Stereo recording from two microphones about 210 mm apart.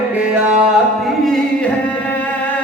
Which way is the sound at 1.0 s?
Centre (ahead or behind).